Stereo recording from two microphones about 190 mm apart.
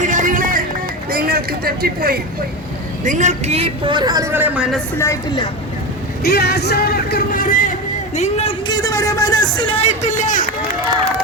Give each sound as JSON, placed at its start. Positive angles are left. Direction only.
{"t": 0.0, "sound": "music", "side_deg": -40}
{"t": 1.1, "sound": "speech", "side_deg": -55}
{"t": 3.0, "sound": "a man's voice", "side_deg": -40}
{"t": 6.2, "sound": "a man's voice", "side_deg": 55}